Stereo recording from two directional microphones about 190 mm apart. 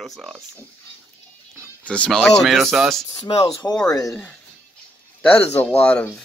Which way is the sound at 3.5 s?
25° left (ahead or behind).